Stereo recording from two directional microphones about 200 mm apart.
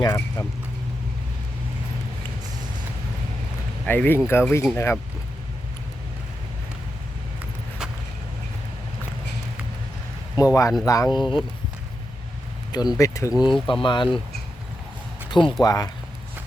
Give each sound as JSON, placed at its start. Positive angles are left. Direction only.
{"t": 0.0, "sound": "speech", "side_deg": 15}
{"t": 3.8, "sound": "speech", "side_deg": 10}
{"t": 7.8, "sound": "vehicle", "side_deg": -5}
{"t": 10.5, "sound": "speech", "side_deg": 15}
{"t": 12.7, "sound": "speech", "side_deg": 20}
{"t": 15.3, "sound": "speech", "side_deg": 25}